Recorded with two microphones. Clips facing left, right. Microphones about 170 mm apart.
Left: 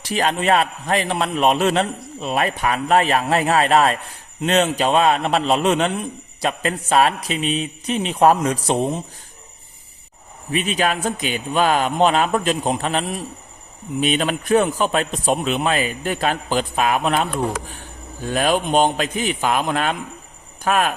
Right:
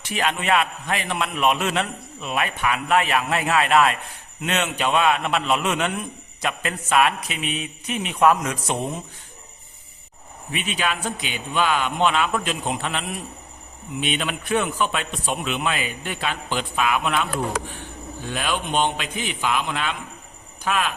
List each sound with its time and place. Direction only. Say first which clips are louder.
0.0 s a man's voice: left 5 dB; 35° left (ahead or behind)
10.5 s a man's voice: left 6 dB; 40° left (ahead or behind)